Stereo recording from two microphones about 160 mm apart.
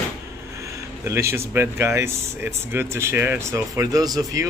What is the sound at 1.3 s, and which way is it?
A man's voice, 15° right (ahead or behind).